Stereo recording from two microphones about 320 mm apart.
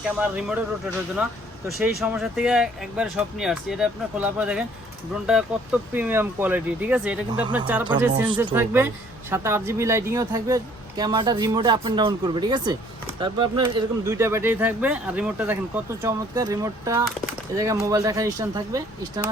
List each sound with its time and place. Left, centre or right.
0.0 s speech: centre
1.6 s speech: centre